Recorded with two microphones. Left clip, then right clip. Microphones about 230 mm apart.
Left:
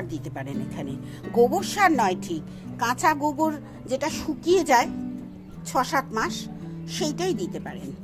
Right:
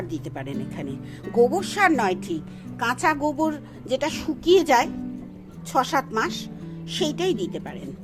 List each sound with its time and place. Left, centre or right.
0.1 s speech: centre